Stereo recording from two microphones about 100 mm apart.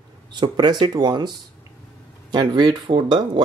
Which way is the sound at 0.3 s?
50° right (ahead or behind).